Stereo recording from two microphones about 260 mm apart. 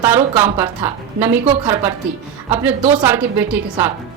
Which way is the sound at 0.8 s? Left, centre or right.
Right.